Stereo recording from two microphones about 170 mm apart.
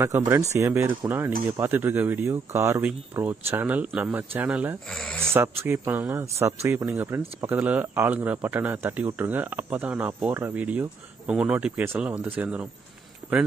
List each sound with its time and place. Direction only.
0.0 s speech: 15° right (ahead or behind)
4.9 s speech: 5° left (ahead or behind)
5.3 s speech: 15° right (ahead or behind)
13.2 s a sound: 10° right (ahead or behind)